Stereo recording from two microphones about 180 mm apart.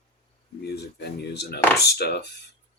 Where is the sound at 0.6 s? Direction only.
65° left (ahead or behind).